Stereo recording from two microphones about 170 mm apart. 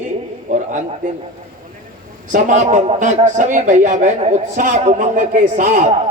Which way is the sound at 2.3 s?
45° right (ahead or behind).